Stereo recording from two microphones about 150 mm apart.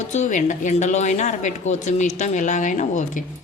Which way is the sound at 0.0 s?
50° left (ahead or behind).